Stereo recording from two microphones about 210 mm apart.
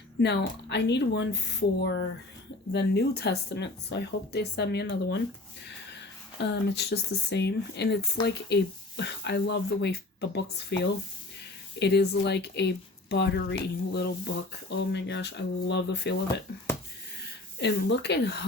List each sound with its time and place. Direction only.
0.2 s speech: 55° left (ahead or behind)
6.4 s speech: 55° left (ahead or behind)